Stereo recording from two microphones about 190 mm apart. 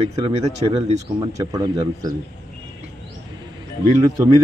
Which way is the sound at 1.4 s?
20° right (ahead or behind).